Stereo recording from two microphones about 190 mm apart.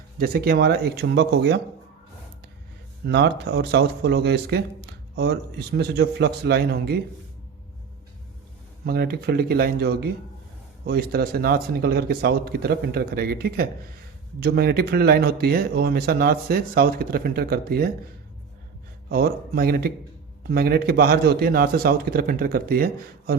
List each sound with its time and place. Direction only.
0.2 s speech: 55° right (ahead or behind)
3.1 s speech: 60° right (ahead or behind)
8.8 s speech: 55° right (ahead or behind)
19.1 s speech: 50° right (ahead or behind)